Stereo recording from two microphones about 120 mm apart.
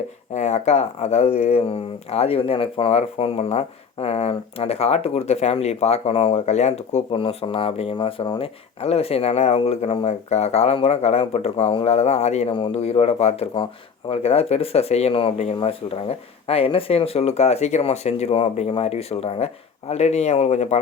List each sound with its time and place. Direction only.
0.3 s speech: 65° left (ahead or behind)
7.1 s speech: 45° left (ahead or behind)
7.9 s speech: 35° left (ahead or behind)
8.8 s speech: 55° left (ahead or behind)
11.9 s speech: 65° left (ahead or behind)
12.5 s speech: 50° left (ahead or behind); by 20.7 s 65° left (ahead or behind)